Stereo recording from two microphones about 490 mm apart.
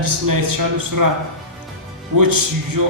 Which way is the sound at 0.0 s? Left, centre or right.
Right.